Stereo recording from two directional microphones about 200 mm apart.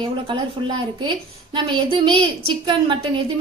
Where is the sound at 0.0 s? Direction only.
20° right (ahead or behind).